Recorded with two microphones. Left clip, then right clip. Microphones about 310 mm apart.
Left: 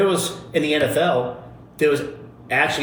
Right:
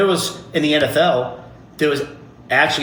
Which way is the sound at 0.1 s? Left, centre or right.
Right.